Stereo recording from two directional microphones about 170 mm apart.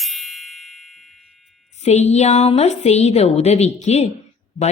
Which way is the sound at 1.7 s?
40° left (ahead or behind).